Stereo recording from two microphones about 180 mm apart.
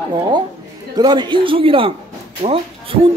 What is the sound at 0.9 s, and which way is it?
Speech, 25° right (ahead or behind).